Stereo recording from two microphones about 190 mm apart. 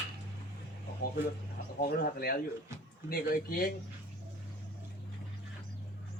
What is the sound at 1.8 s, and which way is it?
Speech, 55° left (ahead or behind).